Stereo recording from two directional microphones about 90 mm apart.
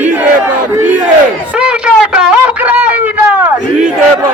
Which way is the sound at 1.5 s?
10° right (ahead or behind).